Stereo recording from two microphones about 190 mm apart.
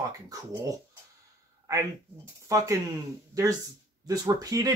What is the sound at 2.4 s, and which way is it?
Speech, 15° right (ahead or behind).